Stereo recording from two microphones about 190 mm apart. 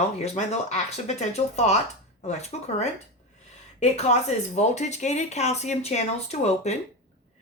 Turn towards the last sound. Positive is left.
turn(degrees=35)  # may be behind; listen again after turning